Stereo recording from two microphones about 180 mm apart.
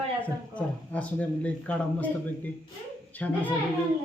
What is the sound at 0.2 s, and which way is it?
Speech, 10° left (ahead or behind).